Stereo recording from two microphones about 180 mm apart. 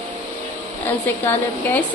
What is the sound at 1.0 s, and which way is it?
Speech, 10° left (ahead or behind).